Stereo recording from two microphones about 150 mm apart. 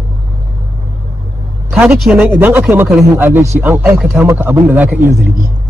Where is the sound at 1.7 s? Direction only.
5° right (ahead or behind).